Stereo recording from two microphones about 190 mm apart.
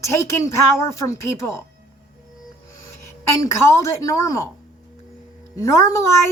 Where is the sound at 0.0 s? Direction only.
15° left (ahead or behind).